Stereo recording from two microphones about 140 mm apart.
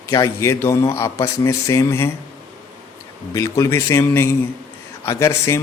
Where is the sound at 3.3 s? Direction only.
20° left (ahead or behind).